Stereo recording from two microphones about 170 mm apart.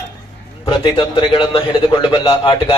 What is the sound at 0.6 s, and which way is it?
A man's voice, 25° left (ahead or behind).